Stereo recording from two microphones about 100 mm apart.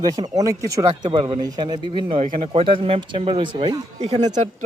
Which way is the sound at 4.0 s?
90° right.